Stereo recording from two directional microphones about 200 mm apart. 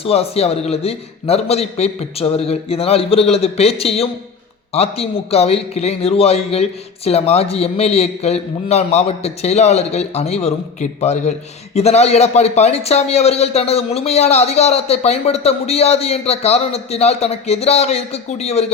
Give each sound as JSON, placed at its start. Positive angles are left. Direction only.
{"t": 0.0, "sound": "a man's voice", "side_deg": 30}